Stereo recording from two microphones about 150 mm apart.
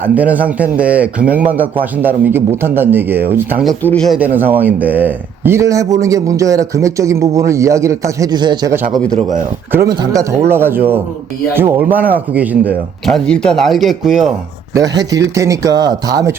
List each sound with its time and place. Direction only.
0.0 s speech: 10° right (ahead or behind)
3.8 s speech: 5° left (ahead or behind)
4.2 s a man's voice: 10° right (ahead or behind); by 8.7 s 30° right (ahead or behind)
9.9 s a man's voice: 25° right (ahead or behind); by 12.7 s 10° right (ahead or behind)
13.1 s speech: 5° left (ahead or behind)
14.7 s a man's voice: 25° right (ahead or behind)